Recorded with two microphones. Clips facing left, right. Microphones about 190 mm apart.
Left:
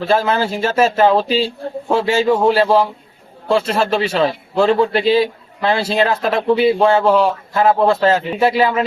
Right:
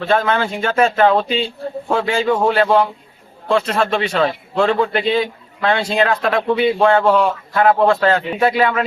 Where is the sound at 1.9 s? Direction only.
25° left (ahead or behind).